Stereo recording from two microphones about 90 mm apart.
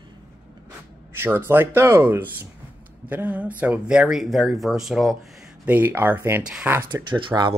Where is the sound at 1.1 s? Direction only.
25° right (ahead or behind); by 5.1 s centre (ahead or behind).